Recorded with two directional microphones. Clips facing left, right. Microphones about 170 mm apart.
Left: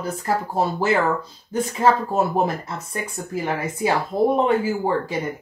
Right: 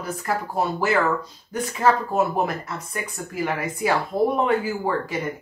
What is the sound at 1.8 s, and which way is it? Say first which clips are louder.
Speech: left 1 dB; 25° left (ahead or behind).